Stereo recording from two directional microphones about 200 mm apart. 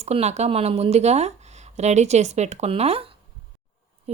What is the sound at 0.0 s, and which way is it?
Speech, 35° right (ahead or behind).